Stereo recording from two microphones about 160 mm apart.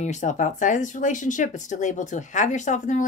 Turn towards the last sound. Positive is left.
turn(degrees=50)  # may be behind; listen again after turning